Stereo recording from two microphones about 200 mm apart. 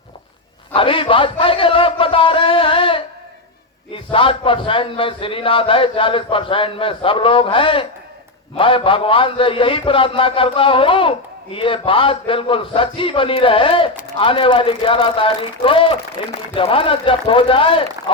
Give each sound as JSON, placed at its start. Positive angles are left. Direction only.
{"t": 0.7, "sound": "a man's voice", "side_deg": 25}